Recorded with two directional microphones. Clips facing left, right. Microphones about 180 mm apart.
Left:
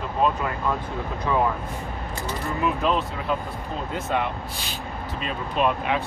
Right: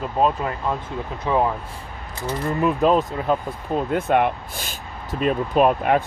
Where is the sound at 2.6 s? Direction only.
40° right (ahead or behind).